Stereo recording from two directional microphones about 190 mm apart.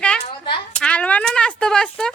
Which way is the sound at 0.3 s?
30° left (ahead or behind).